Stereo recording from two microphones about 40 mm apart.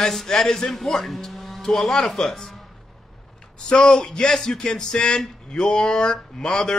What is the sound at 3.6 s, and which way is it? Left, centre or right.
A man's voice, left.